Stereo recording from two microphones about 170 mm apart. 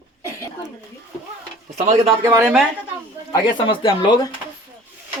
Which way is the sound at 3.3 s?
30° left (ahead or behind).